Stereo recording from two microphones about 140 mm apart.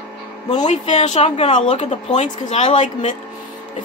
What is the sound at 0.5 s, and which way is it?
A woman's voice, 55° left (ahead or behind).